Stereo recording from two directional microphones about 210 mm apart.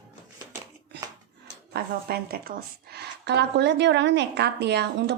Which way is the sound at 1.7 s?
45° right (ahead or behind).